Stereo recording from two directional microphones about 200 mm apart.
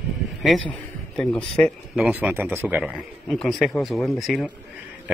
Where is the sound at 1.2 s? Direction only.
5° left (ahead or behind).